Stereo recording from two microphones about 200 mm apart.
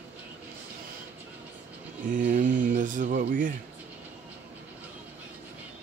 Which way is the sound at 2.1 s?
40° right (ahead or behind).